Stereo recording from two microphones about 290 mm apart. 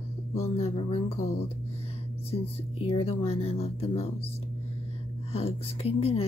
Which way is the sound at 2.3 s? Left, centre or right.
Centre.